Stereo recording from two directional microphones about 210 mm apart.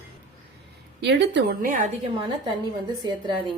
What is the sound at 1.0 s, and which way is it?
Speech, 55° right (ahead or behind).